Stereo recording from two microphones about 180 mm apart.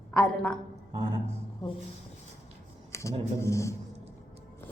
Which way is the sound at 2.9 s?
15° left (ahead or behind).